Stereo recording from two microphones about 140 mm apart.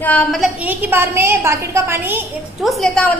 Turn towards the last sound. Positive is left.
turn(degrees=0)  # may be behind; listen again after turning